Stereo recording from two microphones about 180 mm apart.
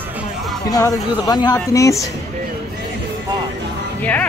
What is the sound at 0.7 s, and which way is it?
Speech, 20° left (ahead or behind).